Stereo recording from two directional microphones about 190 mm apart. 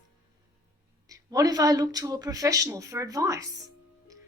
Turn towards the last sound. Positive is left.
turn(degrees=-20)  # may be behind; listen again after turning